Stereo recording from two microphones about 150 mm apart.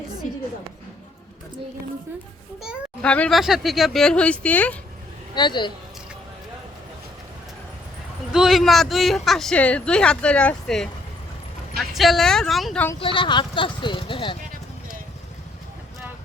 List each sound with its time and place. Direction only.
3.0 s speech: 5° left (ahead or behind)
5.3 s speech: 30° left (ahead or behind)
8.3 s speech: centre (ahead or behind)
13.0 s speech: 35° left (ahead or behind)